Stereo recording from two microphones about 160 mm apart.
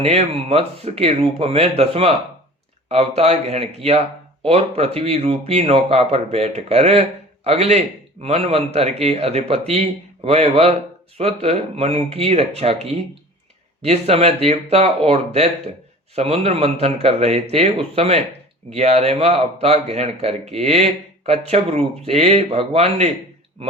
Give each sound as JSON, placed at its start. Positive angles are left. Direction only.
{"t": 0.0, "sound": "speech", "side_deg": -40}